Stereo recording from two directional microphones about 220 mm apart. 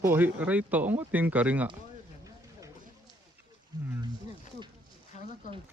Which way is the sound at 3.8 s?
10° right (ahead or behind).